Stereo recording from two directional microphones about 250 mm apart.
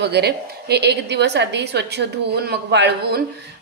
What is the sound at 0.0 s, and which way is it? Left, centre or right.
A woman's voice, right.